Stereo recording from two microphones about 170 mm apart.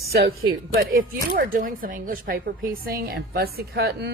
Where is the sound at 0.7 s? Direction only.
55° right (ahead or behind).